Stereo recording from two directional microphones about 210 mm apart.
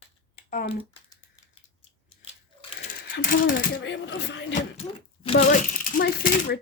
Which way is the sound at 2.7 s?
60° left (ahead or behind).